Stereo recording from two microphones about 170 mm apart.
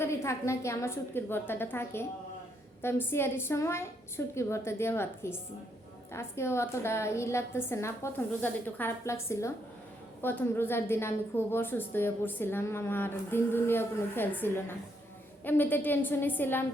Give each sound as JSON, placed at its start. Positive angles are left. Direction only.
{"t": 0.0, "sound": "a woman's voice", "side_deg": 15}